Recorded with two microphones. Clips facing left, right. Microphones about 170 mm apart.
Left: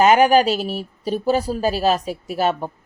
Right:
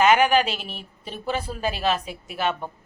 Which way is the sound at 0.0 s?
40° left (ahead or behind).